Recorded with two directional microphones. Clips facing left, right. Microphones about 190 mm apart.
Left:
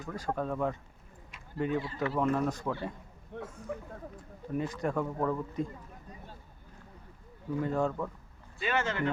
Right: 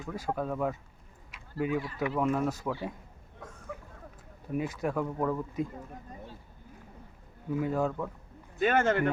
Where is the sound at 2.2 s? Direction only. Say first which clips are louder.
Even; 5° right (ahead or behind).